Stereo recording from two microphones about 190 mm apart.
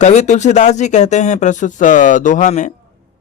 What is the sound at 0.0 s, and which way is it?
Speech, 35° left (ahead or behind).